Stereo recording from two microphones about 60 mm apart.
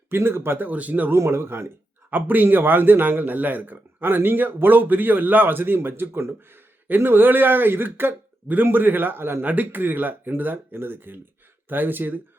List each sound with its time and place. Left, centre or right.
0.1 s a man's voice: right
0.7 s speech: right
1.1 s speech: right
2.0 s a man's voice: right